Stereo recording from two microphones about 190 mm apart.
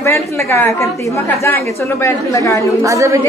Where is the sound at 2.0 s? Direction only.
15° left (ahead or behind).